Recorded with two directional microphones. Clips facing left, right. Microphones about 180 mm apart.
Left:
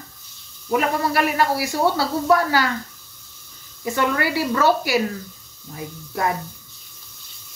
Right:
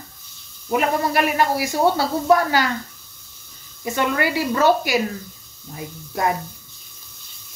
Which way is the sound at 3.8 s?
20° right (ahead or behind).